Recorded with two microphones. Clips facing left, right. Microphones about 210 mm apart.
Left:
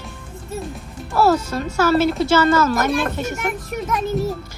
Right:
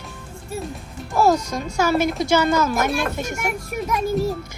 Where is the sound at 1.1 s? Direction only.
10° right (ahead or behind).